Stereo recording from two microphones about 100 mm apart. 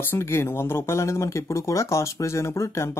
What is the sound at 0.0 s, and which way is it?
Speech, 25° left (ahead or behind).